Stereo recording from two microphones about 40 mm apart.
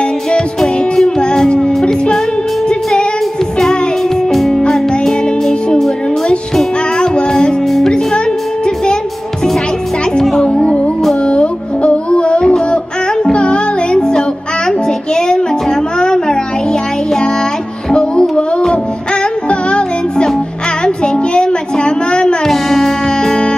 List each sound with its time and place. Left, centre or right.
0.0 s music: left
3.5 s music: centre
7.6 s music: centre
7.9 s music: centre
10.5 s music: left
14.9 s child singing: centre
16.0 s music: centre
19.5 s music: left
20.8 s a sound: left
22.4 s music: centre